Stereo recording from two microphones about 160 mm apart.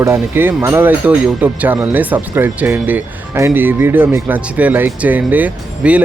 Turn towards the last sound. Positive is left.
turn(degrees=-10)  # may be behind; listen again after turning